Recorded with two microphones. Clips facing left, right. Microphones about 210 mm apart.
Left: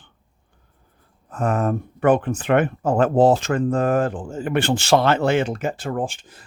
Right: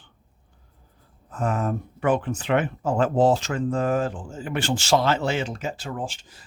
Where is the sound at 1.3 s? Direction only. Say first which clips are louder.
Left 4 dB; 55° left (ahead or behind).